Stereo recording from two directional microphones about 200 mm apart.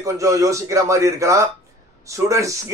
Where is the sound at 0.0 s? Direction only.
15° right (ahead or behind).